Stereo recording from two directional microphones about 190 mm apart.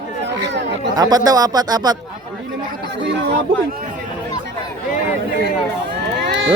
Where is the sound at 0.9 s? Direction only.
20° right (ahead or behind).